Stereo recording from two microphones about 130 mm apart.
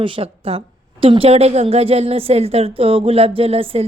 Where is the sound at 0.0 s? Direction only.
50° right (ahead or behind).